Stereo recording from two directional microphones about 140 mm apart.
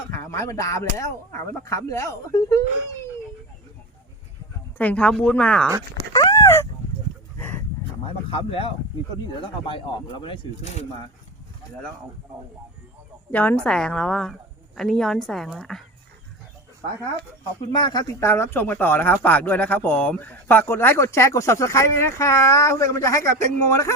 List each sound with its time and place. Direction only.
0.1 s speech: 20° left (ahead or behind)
4.8 s a man's voice: 10° left (ahead or behind)
5.6 s speech: 25° right (ahead or behind)
6.1 s a sound: 25° left (ahead or behind)
8.0 s speech: 40° left (ahead or behind)
13.3 s a woman's voice: 10° left (ahead or behind)
17.7 s speech: 35° left (ahead or behind)
18.2 s a man's voice: 15° left (ahead or behind)